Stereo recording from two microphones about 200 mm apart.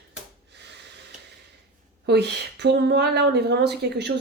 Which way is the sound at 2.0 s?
55° right (ahead or behind).